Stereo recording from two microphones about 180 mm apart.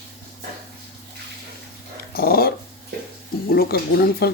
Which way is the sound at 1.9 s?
60° left (ahead or behind).